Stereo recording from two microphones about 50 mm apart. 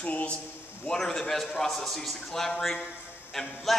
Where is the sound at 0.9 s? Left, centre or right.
Centre.